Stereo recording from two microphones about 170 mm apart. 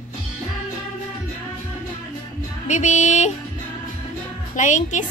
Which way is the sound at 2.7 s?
45° left (ahead or behind).